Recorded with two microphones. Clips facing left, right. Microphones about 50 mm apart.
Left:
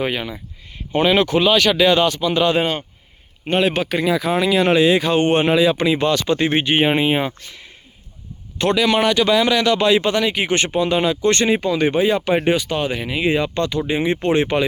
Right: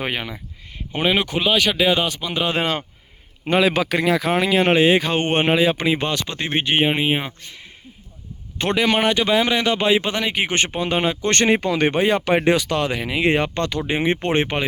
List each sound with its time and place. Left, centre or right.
0.0 s a man's voice: right
0.9 s a man's voice: centre
3.8 s a man's voice: right
6.2 s speech: centre
8.5 s a man's voice: right
12.5 s speech: right
14.4 s speech: right